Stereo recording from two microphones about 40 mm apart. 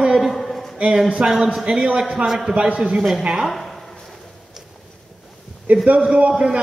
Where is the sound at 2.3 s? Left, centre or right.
Centre.